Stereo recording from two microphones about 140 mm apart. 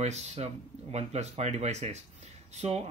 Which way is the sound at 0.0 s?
50° right (ahead or behind).